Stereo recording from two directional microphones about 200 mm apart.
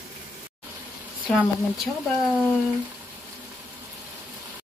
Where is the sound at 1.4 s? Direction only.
Centre (ahead or behind).